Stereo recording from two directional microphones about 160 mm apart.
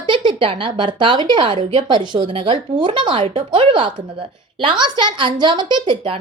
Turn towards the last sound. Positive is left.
turn(degrees=-30)  # may be behind; listen again after turning